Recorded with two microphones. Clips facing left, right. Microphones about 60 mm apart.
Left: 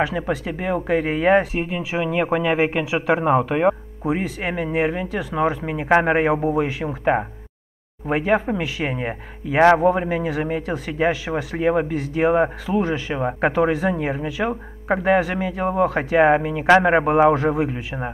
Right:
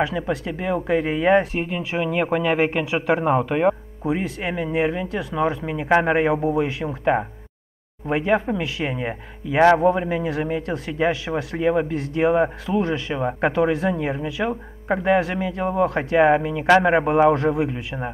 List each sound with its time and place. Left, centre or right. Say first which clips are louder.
0.0 s speech: left 1 dB; centre
8.1 s speech: left 1 dB; centre
11.5 s speech: left 1 dB; centre
11.9 s speech: left 1 dB; centre